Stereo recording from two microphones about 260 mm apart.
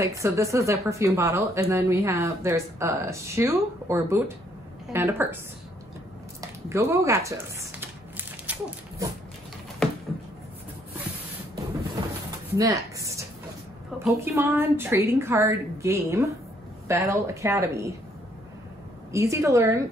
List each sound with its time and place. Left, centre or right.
0.0 s speech: centre
6.4 s a sound: centre
12.5 s speech: centre
19.1 s speech: centre